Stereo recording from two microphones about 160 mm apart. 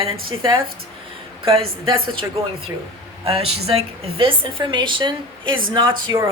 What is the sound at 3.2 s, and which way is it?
A woman's voice, 40° right (ahead or behind).